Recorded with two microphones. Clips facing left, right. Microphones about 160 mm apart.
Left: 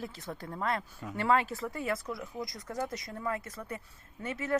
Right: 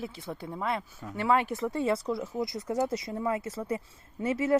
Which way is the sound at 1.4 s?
20° right (ahead or behind).